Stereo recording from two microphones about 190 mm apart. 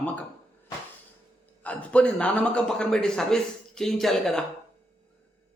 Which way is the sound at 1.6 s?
5° left (ahead or behind).